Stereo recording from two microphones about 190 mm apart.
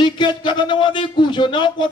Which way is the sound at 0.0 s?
25° left (ahead or behind).